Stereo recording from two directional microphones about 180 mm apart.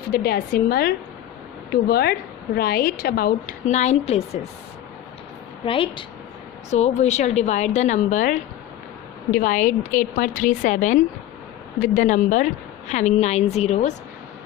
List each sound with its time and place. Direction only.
0.1 s a woman's voice: 55° left (ahead or behind)
3.7 s a woman's voice: 40° left (ahead or behind)
5.6 s a woman's voice: 30° left (ahead or behind)